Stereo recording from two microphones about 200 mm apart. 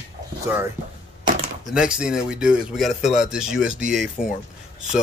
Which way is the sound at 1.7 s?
5° right (ahead or behind).